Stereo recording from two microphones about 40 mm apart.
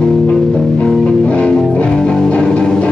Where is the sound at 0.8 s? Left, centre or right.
Left.